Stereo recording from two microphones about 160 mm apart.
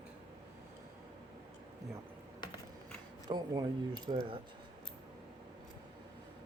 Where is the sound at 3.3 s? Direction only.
25° right (ahead or behind).